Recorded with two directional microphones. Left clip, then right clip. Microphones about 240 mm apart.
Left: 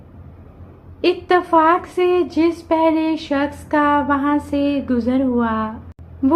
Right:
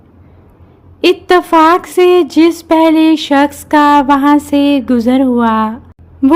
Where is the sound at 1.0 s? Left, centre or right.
Right.